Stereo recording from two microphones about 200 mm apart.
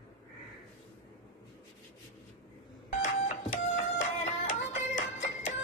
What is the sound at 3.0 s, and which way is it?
Music, 40° left (ahead or behind).